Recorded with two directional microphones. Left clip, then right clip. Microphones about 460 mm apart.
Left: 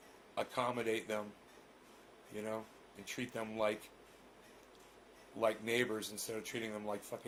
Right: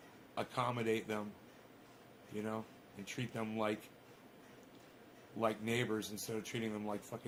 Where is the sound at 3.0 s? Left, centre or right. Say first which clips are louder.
Left 1 dB; centre.